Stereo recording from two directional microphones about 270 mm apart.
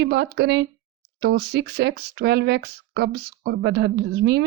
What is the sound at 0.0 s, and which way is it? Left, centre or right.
Speech, right.